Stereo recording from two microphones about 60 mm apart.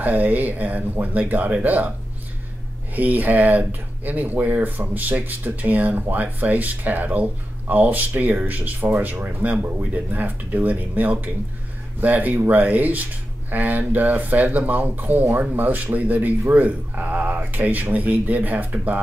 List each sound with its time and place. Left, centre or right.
0.0 s speech: right
2.9 s speech: right